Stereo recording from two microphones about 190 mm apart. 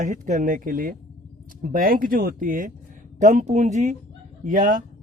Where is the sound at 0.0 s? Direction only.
40° right (ahead or behind).